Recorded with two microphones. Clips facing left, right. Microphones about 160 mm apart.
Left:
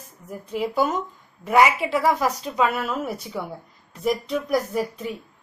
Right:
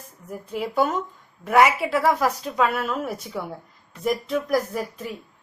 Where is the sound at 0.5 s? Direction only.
Centre (ahead or behind).